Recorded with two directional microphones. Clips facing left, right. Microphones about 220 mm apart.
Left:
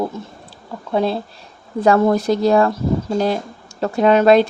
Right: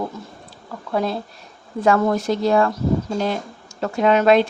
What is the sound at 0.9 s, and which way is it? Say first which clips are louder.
Speech: left 4 dB; 30° left (ahead or behind).